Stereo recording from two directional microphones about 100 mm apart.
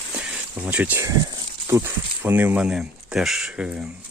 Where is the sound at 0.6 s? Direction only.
15° right (ahead or behind).